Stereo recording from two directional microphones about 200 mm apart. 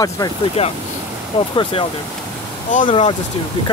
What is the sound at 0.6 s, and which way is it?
Speech, 30° left (ahead or behind).